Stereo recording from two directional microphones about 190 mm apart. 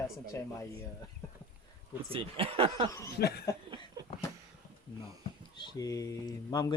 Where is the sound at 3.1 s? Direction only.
55° left (ahead or behind).